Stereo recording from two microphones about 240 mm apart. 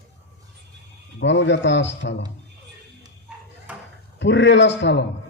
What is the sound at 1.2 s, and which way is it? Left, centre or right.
A man's voice, left.